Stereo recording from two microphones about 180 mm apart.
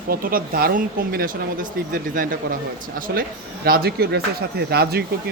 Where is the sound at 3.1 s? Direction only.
65° right (ahead or behind).